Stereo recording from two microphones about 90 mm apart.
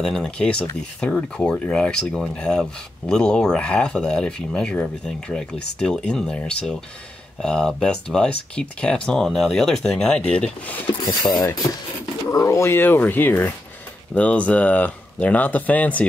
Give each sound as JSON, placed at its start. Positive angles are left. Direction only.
{"t": 0.0, "sound": "speech", "side_deg": 5}
{"t": 11.1, "sound": "mechanisms", "side_deg": 50}
{"t": 12.3, "sound": "speech", "side_deg": 35}